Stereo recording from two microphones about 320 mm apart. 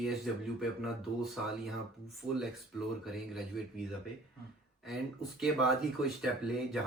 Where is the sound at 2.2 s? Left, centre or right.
Centre.